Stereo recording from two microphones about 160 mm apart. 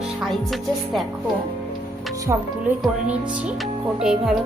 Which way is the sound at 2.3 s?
20° right (ahead or behind).